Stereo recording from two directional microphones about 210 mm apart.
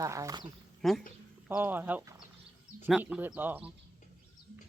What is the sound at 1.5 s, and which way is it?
Speech, 10° right (ahead or behind).